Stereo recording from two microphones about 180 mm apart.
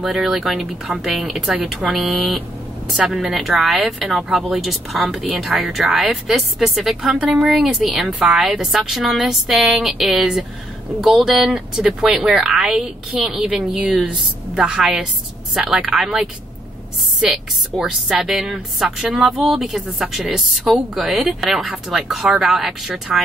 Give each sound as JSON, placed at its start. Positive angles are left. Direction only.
{"t": 0.0, "sound": "speech", "side_deg": -5}